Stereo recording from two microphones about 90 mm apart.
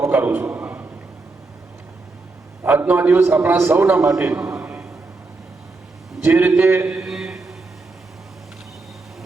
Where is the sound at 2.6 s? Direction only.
20° right (ahead or behind).